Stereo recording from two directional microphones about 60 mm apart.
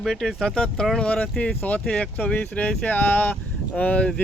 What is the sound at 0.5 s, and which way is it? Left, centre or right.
Speech, centre.